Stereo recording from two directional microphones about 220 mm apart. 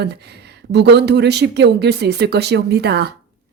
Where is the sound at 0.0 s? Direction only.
50° right (ahead or behind).